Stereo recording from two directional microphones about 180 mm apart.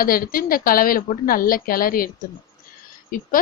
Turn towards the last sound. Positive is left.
turn(degrees=50)  # may be behind; listen again after turning